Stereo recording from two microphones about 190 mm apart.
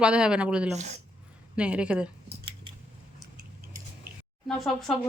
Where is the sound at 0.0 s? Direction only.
5° right (ahead or behind).